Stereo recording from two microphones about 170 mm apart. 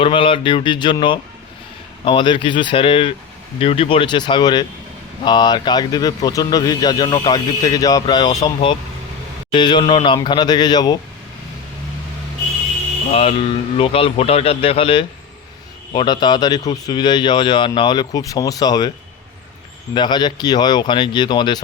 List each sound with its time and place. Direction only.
0.0 s speech: 30° left (ahead or behind)
13.1 s speech: 35° left (ahead or behind)
19.9 s speech: 25° left (ahead or behind)